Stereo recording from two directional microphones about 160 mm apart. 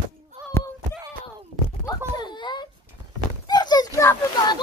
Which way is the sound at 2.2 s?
25° left (ahead or behind).